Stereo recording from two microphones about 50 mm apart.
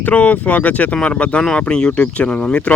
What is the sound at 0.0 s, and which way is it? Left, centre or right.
Speech, left.